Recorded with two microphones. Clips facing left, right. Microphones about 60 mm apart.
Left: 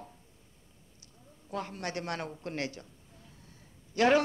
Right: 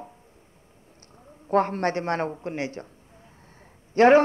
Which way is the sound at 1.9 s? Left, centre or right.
Right.